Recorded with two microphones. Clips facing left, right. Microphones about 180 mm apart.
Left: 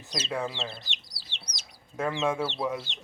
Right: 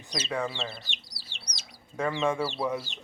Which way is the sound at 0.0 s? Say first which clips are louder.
Even; 5° left (ahead or behind).